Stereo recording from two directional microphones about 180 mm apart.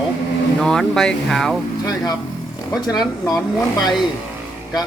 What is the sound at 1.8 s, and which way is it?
Speech, 20° left (ahead or behind).